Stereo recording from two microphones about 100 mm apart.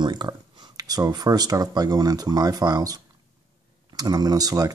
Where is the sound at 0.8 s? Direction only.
40° right (ahead or behind).